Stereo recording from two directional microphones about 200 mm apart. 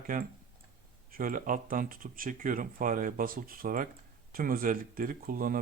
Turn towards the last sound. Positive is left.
turn(degrees=-45)  # may be behind; listen again after turning